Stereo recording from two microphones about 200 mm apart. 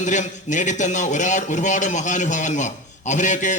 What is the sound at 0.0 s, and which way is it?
A man's voice, 35° left (ahead or behind).